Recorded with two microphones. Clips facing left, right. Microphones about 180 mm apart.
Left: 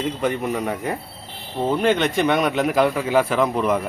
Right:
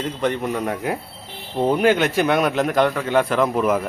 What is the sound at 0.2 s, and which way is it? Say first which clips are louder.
A man's voice: even; 5° left (ahead or behind).